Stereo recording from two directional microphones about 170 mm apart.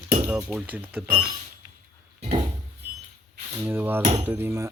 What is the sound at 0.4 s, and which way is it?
Speech, 5° right (ahead or behind).